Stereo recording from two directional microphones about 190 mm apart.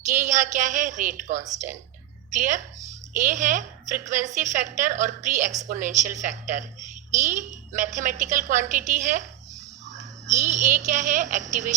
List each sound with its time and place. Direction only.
0.1 s a woman's voice: 40° right (ahead or behind)